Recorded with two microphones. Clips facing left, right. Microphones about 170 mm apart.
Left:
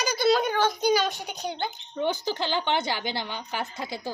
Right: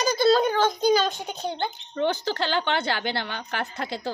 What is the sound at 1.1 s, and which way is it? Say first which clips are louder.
Speech: right 3 dB; 25° right (ahead or behind).